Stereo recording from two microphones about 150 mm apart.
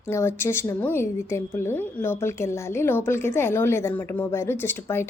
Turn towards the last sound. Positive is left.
turn(degrees=15)  # may be behind; listen again after turning